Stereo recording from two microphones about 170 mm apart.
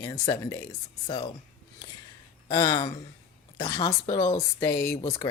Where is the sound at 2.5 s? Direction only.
25° left (ahead or behind).